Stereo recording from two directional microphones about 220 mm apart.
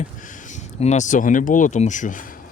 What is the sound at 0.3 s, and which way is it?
Speech, 35° left (ahead or behind).